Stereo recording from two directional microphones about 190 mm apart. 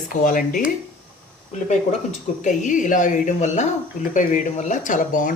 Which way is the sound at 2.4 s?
40° left (ahead or behind).